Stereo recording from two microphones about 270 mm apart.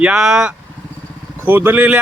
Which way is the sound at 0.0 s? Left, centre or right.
Centre.